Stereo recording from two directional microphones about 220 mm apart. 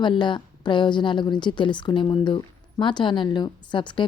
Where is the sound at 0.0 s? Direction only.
20° left (ahead or behind).